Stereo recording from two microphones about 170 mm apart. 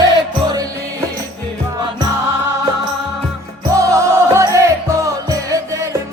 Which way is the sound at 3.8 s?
15° right (ahead or behind).